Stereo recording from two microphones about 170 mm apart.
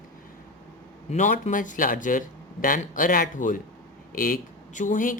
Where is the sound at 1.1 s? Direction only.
45° left (ahead or behind).